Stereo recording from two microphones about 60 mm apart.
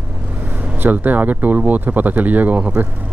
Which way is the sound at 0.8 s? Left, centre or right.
Right.